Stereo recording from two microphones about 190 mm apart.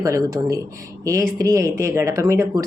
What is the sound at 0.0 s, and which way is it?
Speech, 15° right (ahead or behind).